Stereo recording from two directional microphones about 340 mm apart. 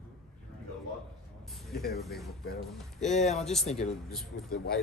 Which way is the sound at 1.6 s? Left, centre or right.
Centre.